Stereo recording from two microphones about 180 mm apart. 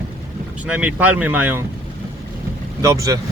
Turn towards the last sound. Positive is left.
turn(degrees=-15)  # may be behind; listen again after turning